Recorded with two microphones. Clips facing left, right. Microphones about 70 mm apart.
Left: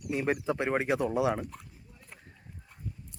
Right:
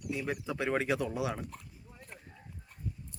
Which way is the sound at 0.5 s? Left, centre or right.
Left.